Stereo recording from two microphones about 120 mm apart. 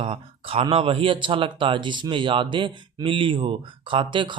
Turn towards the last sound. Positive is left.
turn(degrees=-40)  # may be behind; listen again after turning